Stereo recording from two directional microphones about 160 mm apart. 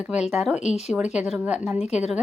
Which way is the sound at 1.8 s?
45° left (ahead or behind).